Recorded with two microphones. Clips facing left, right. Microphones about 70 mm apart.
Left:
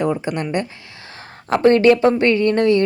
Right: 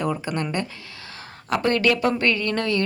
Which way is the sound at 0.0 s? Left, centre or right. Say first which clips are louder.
Left 5 dB; left.